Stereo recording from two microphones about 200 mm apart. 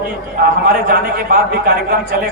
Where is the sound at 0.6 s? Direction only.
50° right (ahead or behind).